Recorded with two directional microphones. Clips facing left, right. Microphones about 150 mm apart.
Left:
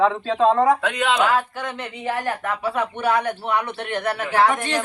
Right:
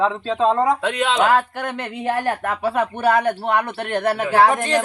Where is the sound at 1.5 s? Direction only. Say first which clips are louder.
Right 3 dB; 60° right (ahead or behind).